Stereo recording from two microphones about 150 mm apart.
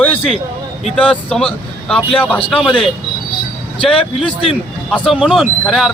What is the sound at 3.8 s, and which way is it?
Speech, 5° left (ahead or behind).